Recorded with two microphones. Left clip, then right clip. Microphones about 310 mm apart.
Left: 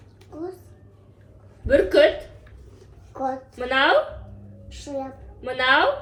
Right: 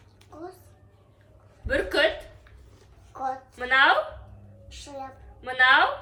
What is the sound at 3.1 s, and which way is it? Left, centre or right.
Speech, centre.